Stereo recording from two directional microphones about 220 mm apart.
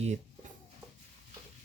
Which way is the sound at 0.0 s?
30° right (ahead or behind).